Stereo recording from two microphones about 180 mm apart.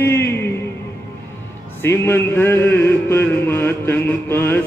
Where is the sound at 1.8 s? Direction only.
15° left (ahead or behind).